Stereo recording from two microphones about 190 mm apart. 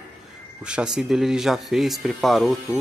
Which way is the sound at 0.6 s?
5° right (ahead or behind).